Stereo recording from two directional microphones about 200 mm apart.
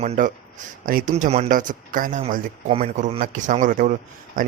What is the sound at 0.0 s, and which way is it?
Speech, 35° right (ahead or behind).